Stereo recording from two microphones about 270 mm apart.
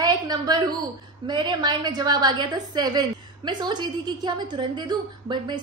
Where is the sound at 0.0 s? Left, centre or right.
Centre.